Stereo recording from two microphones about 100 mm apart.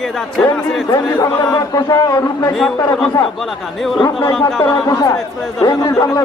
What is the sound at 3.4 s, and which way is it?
Speech, centre (ahead or behind).